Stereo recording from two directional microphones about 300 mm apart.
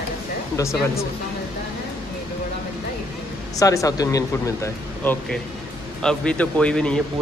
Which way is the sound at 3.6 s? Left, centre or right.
Centre.